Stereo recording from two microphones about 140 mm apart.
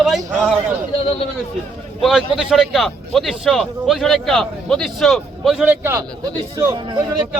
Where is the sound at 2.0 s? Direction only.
5° right (ahead or behind).